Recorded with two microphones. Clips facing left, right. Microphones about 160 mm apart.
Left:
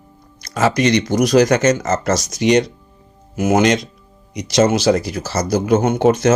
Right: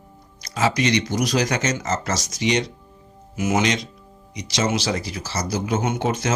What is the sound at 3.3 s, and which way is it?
Speech, 60° left (ahead or behind).